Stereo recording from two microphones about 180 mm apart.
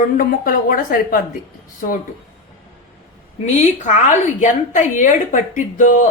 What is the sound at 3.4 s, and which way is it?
Speech, 40° left (ahead or behind).